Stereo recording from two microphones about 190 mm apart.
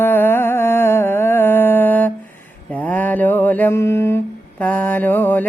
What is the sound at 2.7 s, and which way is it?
Mantra, 10° left (ahead or behind).